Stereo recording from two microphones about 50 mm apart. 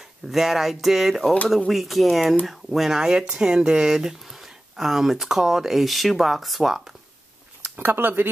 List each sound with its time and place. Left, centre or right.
0.3 s speech: centre
7.6 s speech: right